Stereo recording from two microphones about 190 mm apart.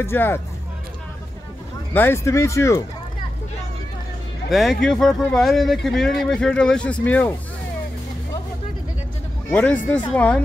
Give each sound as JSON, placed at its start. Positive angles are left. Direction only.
{"t": 0.0, "sound": "speech", "side_deg": 10}
{"t": 2.0, "sound": "speech", "side_deg": 15}
{"t": 4.5, "sound": "speech", "side_deg": 0}
{"t": 9.5, "sound": "speech", "side_deg": 10}